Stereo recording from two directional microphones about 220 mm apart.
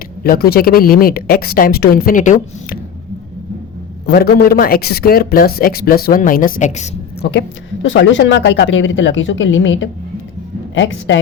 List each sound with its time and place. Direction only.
0.2 s a man's voice: 45° left (ahead or behind)
4.0 s a man's voice: 45° left (ahead or behind)
7.2 s speech: 50° left (ahead or behind)